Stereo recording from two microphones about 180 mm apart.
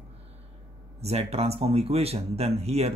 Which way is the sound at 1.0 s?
35° right (ahead or behind).